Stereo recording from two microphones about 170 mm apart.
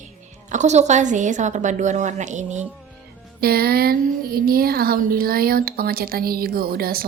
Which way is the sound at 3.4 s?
65° right (ahead or behind).